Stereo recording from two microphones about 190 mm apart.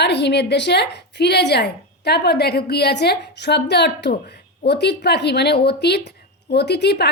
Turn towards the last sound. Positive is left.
turn(degrees=60)  # may be behind; listen again after turning